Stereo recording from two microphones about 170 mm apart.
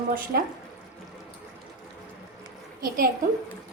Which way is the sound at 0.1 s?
55° right (ahead or behind).